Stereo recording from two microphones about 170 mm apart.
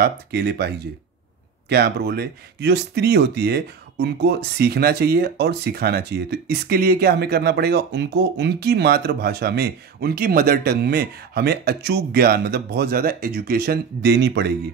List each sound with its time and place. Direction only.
0.0 s speech: 70° right (ahead or behind)